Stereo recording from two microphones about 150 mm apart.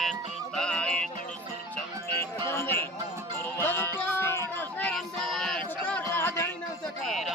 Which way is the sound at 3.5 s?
15° left (ahead or behind).